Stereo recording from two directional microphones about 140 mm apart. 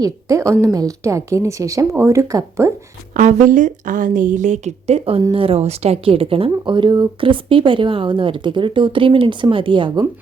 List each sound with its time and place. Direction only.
0.0 s a woman's voice: 25° right (ahead or behind)
3.2 s a woman's voice: 65° right (ahead or behind); by 10.1 s 30° right (ahead or behind)